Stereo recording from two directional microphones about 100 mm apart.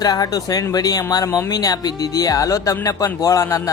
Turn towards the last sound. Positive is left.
turn(degrees=30)  # may be behind; listen again after turning